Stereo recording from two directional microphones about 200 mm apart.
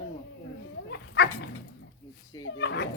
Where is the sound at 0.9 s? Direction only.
60° left (ahead or behind).